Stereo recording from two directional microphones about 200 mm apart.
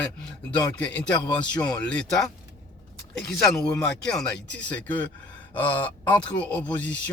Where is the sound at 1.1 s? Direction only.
20° left (ahead or behind).